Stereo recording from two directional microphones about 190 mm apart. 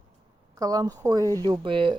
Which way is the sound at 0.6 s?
20° right (ahead or behind).